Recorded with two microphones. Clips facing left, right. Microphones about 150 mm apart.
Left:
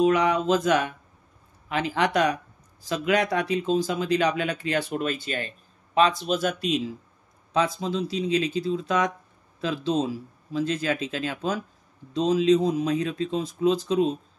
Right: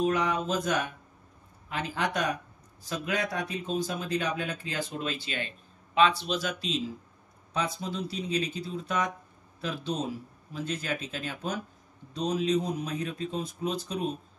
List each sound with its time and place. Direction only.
0.0 s speech: 90° left; by 6.8 s 55° left (ahead or behind)
7.5 s speech: 90° left